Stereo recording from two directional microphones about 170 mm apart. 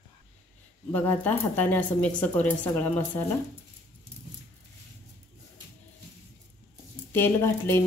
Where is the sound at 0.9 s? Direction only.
10° left (ahead or behind).